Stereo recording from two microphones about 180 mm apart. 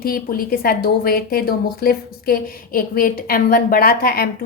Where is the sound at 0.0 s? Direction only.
55° left (ahead or behind).